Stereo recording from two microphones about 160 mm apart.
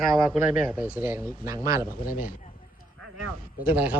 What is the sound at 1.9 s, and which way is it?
Speech, 60° left (ahead or behind).